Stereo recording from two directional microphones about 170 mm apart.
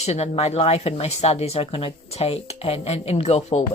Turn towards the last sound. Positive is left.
turn(degrees=40)  # may be behind; listen again after turning